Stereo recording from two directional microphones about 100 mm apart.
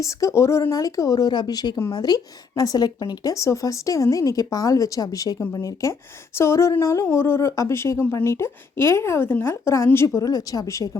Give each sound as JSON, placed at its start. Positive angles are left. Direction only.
{"t": 0.0, "sound": "speech", "side_deg": 30}
{"t": 10.2, "sound": "speech", "side_deg": 35}